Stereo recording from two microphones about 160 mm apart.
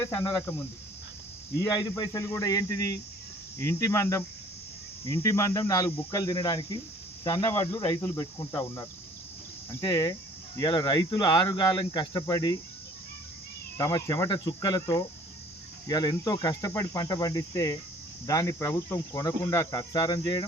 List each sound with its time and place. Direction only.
0.0 s cricket: 15° left (ahead or behind)
1.5 s speech: 25° left (ahead or behind)
8.0 s cricket: 15° left (ahead or behind)
9.8 s speech: 25° left (ahead or behind)
13.7 s speech: 20° left (ahead or behind)